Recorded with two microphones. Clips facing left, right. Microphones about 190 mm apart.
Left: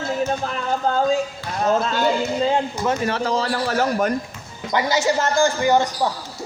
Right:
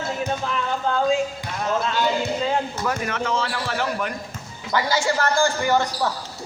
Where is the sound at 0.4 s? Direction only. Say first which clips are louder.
Left 2 dB; 40° left (ahead or behind).